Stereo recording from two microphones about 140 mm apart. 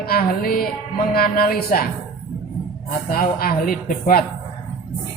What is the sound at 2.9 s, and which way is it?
A woman's voice, 85° left.